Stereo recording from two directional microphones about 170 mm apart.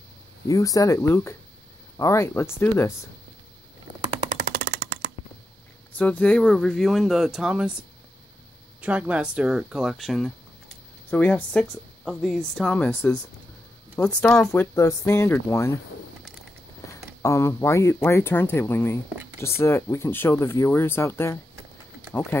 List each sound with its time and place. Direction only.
0.5 s speech: 20° left (ahead or behind)
4.4 s music: 65° right (ahead or behind); by 5.1 s 90° right
5.9 s speech: 10° left (ahead or behind)
8.8 s speech: 10° right (ahead or behind)
14.5 s speech: 15° left (ahead or behind)
16.8 s speech: 15° left (ahead or behind)